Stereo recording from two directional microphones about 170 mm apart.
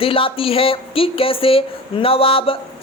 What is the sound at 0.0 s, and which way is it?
A woman's voice, 30° left (ahead or behind).